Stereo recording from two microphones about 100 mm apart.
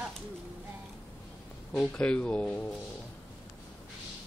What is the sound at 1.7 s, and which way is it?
Speech, 10° left (ahead or behind).